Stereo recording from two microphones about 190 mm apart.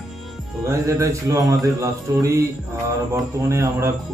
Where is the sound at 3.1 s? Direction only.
15° right (ahead or behind).